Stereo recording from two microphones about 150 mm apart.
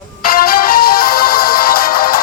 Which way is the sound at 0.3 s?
80° left.